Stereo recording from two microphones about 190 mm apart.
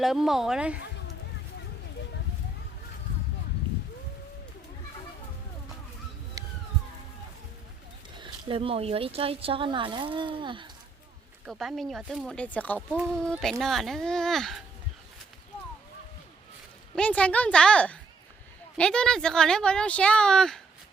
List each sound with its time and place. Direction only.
0.0 s speech: centre (ahead or behind)
6.4 s a sound: 20° right (ahead or behind)
8.2 s speech: 30° right (ahead or behind)
11.4 s speech: centre (ahead or behind)
16.9 s a woman's voice: 5° left (ahead or behind)